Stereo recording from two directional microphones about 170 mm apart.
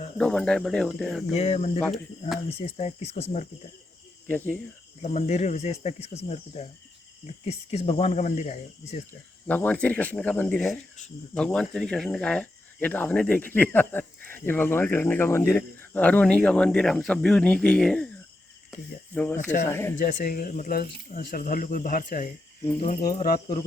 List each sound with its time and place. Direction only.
0.2 s speech: 5° left (ahead or behind)
1.3 s speech: 40° left (ahead or behind)
4.3 s speech: 10° left (ahead or behind)
5.0 s speech: 40° left (ahead or behind)
9.5 s speech: 10° left (ahead or behind)
19.1 s speech: 10° left (ahead or behind)
19.4 s speech: 50° left (ahead or behind)
19.6 s speech: 15° left (ahead or behind)
20.0 s speech: 55° left (ahead or behind)